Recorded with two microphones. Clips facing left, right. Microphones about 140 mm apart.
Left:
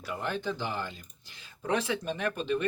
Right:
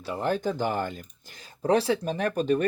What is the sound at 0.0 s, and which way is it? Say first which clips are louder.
Speech: right 6 dB; 35° right (ahead or behind).